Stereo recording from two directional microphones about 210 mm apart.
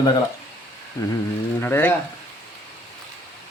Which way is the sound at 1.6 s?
10° left (ahead or behind).